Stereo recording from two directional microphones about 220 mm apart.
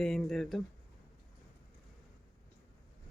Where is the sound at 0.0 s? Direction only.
Centre (ahead or behind).